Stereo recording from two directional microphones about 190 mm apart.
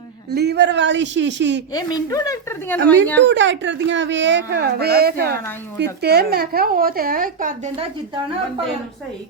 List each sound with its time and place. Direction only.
0.3 s speech: 60° right (ahead or behind)
1.7 s a woman's voice: 20° left (ahead or behind)
3.2 s speech: 70° right (ahead or behind); by 7.7 s 45° right (ahead or behind)